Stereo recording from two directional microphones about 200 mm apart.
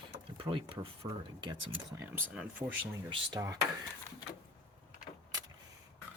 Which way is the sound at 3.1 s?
20° right (ahead or behind).